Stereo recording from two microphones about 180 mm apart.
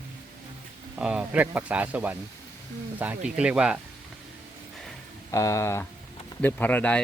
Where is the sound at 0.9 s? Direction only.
5° right (ahead or behind).